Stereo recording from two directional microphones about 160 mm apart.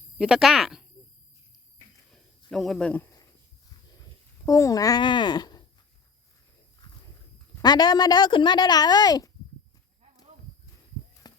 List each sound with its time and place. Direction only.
0.2 s speech: 5° right (ahead or behind)
2.5 s speech: centre (ahead or behind)
4.4 s a woman's voice: 20° left (ahead or behind)
6.8 s walk: 25° left (ahead or behind)
7.5 s a woman's voice: 25° left (ahead or behind)
11.2 s a sound: 25° left (ahead or behind)